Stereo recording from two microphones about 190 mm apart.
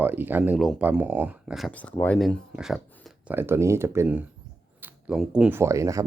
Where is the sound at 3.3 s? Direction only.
10° right (ahead or behind).